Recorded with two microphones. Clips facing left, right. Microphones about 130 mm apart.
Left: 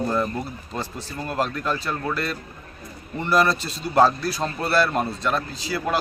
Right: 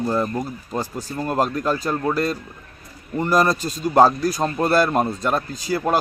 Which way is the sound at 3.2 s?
40° right (ahead or behind).